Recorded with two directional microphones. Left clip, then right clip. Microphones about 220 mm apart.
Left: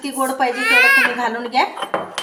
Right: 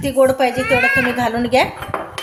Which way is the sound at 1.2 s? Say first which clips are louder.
Right 3 dB; 45° right (ahead or behind).